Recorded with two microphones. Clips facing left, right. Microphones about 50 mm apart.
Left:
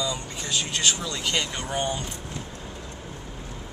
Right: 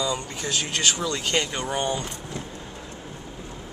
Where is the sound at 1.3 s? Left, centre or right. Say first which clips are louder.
Right 2 dB; right.